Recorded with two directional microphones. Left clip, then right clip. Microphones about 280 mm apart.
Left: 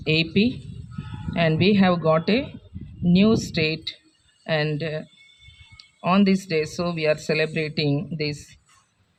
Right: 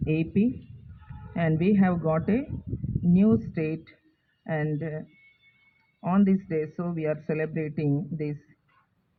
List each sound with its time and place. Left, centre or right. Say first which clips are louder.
0.0 s speech: left 6 dB; left